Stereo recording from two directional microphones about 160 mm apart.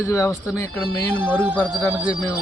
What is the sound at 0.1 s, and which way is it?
Speech, 20° left (ahead or behind).